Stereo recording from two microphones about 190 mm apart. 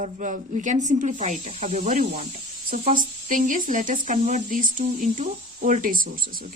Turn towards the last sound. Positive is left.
turn(degrees=-50)  # may be behind; listen again after turning